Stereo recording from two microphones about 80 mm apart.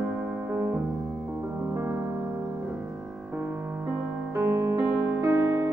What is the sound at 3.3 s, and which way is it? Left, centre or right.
Music, centre.